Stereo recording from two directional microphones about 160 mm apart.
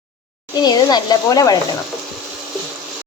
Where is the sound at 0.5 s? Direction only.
25° left (ahead or behind).